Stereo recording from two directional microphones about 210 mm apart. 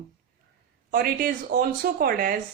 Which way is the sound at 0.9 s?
45° right (ahead or behind).